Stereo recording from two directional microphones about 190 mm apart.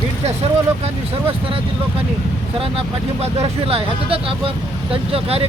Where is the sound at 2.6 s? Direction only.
30° right (ahead or behind).